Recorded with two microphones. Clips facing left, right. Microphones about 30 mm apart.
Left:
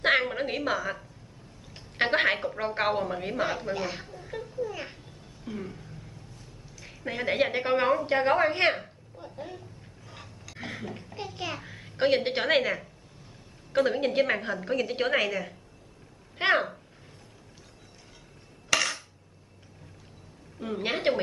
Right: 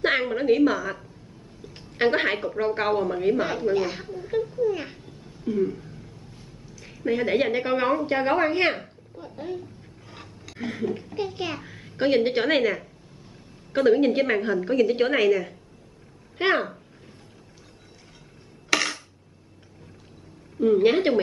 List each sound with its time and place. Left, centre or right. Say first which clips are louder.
0.0 s a woman's voice: right 2 dB; centre
11.1 s a child's voice: right 6 dB; centre
11.5 s a child's voice: right 4 dB; centre
18.7 s coin: right 2 dB; centre
20.5 s a woman's voice: right 12 dB; centre